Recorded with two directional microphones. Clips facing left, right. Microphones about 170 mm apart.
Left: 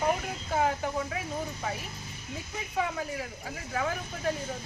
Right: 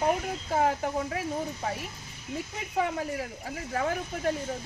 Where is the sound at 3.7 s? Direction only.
35° right (ahead or behind).